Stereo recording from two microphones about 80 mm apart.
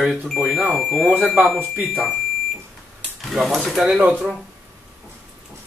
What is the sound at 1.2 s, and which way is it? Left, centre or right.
Speech, centre.